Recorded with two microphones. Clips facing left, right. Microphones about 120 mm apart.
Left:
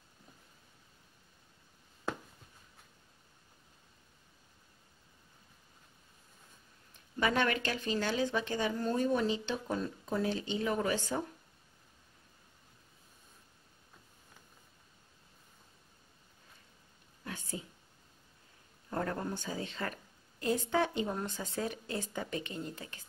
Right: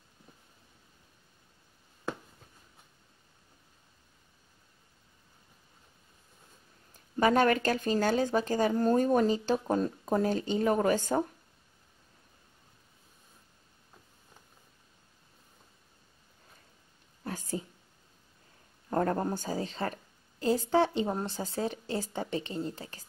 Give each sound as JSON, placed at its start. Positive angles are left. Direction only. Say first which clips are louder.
{"t": 6.9, "sound": "speech", "louder": "right 7 dB", "side_deg": -40}
{"t": 17.2, "sound": "a woman's voice", "louder": "right 6 dB", "side_deg": -40}
{"t": 18.9, "sound": "a woman's voice", "louder": "right 7 dB", "side_deg": -40}